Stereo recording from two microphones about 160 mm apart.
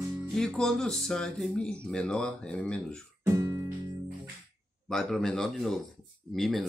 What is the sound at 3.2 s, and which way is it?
Guitar, 20° right (ahead or behind).